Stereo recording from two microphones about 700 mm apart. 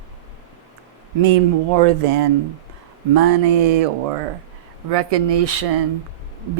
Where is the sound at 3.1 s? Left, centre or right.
Right.